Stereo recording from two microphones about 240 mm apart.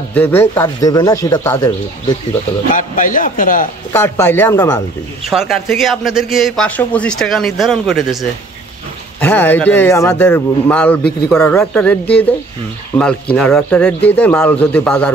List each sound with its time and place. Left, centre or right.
0.1 s speech: centre
2.7 s a man's voice: left
3.9 s speech: centre
5.3 s speech: centre